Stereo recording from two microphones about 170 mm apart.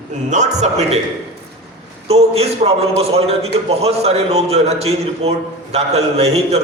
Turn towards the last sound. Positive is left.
turn(degrees=-40)  # may be behind; listen again after turning